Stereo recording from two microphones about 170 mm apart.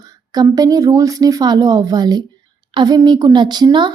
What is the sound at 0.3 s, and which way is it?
A woman's voice, 20° right (ahead or behind).